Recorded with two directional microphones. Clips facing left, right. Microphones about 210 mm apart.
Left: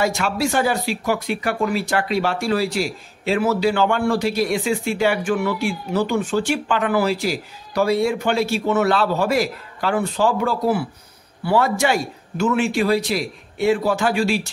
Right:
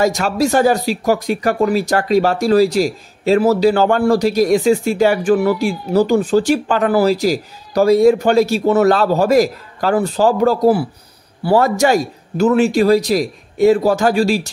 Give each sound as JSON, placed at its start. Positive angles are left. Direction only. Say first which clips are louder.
{"t": 0.0, "sound": "speech", "louder": "right 5 dB", "side_deg": -40}